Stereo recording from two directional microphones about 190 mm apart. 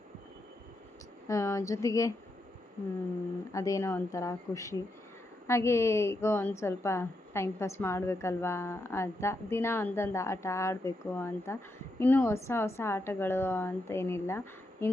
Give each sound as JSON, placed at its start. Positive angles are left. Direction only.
{"t": 1.3, "sound": "a woman's voice", "side_deg": 15}
{"t": 3.5, "sound": "a woman's voice", "side_deg": 15}